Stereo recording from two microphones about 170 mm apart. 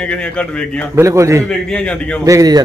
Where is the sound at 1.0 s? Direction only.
15° right (ahead or behind).